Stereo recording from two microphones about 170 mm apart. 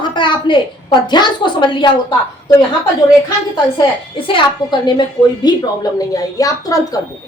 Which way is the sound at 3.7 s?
30° left (ahead or behind).